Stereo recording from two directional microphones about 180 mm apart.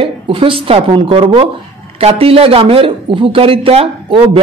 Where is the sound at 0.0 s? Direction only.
30° right (ahead or behind).